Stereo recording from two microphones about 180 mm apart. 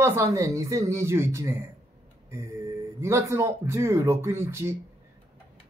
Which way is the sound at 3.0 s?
15° right (ahead or behind).